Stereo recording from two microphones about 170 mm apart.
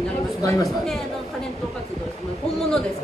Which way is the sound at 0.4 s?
20° left (ahead or behind).